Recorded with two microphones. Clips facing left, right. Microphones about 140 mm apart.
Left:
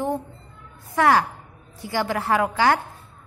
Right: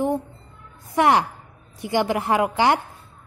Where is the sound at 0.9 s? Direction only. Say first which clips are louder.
Right 1 dB; 20° right (ahead or behind).